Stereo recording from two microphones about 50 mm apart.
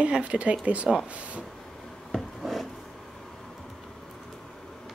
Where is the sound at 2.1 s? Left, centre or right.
Centre.